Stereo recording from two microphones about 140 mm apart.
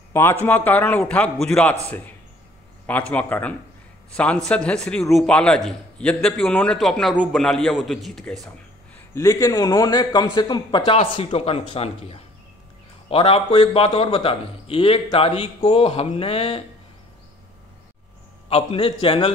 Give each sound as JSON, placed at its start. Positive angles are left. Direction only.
{"t": 0.1, "sound": "a man's voice", "side_deg": 15}
{"t": 9.1, "sound": "a man's voice", "side_deg": 20}
{"t": 18.5, "sound": "a man's voice", "side_deg": 45}